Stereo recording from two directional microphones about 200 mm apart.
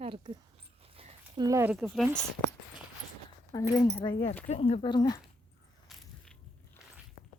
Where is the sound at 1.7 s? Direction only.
Centre (ahead or behind).